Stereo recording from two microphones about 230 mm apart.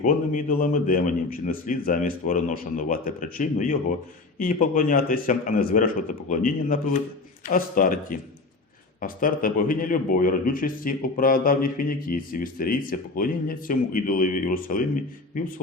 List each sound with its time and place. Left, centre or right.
0.0 s a man's voice: left